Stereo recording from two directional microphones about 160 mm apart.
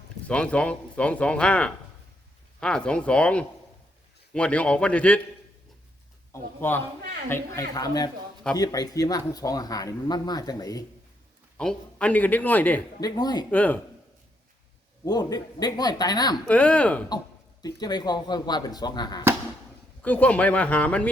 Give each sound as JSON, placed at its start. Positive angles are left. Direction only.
{"t": 0.3, "sound": "speech", "side_deg": 5}
{"t": 6.3, "sound": "speech", "side_deg": 15}
{"t": 11.5, "sound": "speech", "side_deg": 5}
{"t": 13.0, "sound": "speech", "side_deg": 25}
{"t": 13.5, "sound": "speech", "side_deg": 10}
{"t": 15.0, "sound": "speech", "side_deg": 25}
{"t": 16.5, "sound": "speech", "side_deg": 10}
{"t": 17.6, "sound": "speech", "side_deg": 25}
{"t": 20.0, "sound": "speech", "side_deg": 10}